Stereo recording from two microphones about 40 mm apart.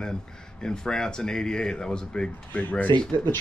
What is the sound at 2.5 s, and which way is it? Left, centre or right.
Speech, left.